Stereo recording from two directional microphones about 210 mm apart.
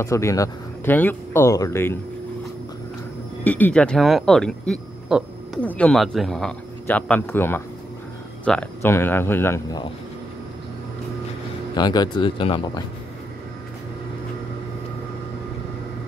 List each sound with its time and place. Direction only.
0.0 s speech: 15° left (ahead or behind)
3.4 s speech: 10° left (ahead or behind)
11.7 s speech: 20° left (ahead or behind)